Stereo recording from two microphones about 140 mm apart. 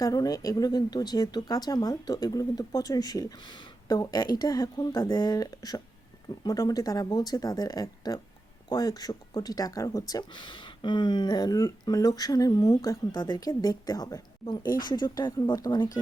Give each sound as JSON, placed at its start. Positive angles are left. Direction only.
{"t": 0.0, "sound": "speech", "side_deg": 25}